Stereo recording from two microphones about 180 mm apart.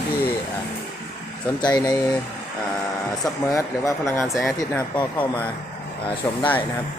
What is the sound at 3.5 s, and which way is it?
Speech, 15° left (ahead or behind).